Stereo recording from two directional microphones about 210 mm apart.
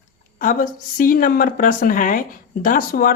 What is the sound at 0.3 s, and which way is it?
A woman's voice, 40° left (ahead or behind).